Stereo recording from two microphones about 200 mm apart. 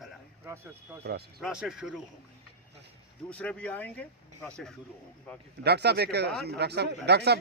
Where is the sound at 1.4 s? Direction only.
5° right (ahead or behind).